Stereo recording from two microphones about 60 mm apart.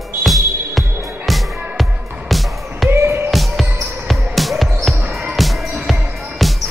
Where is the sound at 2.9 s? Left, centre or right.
Right.